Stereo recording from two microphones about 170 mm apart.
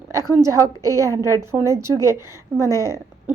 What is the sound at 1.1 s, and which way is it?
Speech, 15° left (ahead or behind).